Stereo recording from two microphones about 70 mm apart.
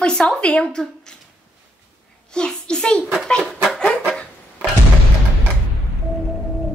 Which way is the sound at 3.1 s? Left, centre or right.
Centre.